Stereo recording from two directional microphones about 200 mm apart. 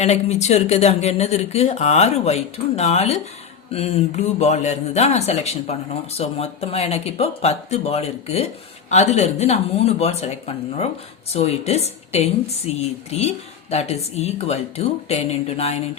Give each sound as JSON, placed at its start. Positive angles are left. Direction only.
{"t": 0.0, "sound": "speech", "side_deg": 35}